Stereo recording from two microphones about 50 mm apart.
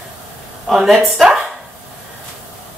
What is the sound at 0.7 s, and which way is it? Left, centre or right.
Speech, centre.